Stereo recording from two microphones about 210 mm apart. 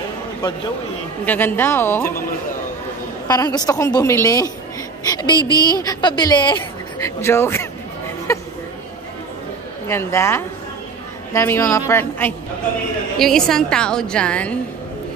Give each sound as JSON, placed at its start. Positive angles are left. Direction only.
{"t": 1.2, "sound": "speech", "side_deg": 10}
{"t": 3.3, "sound": "a woman's voice", "side_deg": 20}
{"t": 5.4, "sound": "a woman's voice", "side_deg": -15}
{"t": 5.7, "sound": "speech", "side_deg": 20}
{"t": 8.3, "sound": "a sound", "side_deg": 15}
{"t": 9.8, "sound": "a woman's voice", "side_deg": 10}